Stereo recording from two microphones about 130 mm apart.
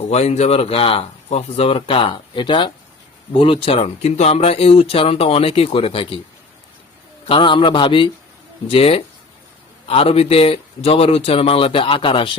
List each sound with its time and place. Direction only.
0.1 s speech: 55° left (ahead or behind)
7.3 s a man's voice: 40° left (ahead or behind)